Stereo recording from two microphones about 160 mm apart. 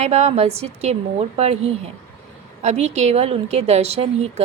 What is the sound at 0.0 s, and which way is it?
A woman's voice, 45° right (ahead or behind).